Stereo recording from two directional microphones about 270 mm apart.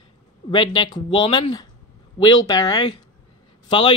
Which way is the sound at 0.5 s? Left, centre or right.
Centre.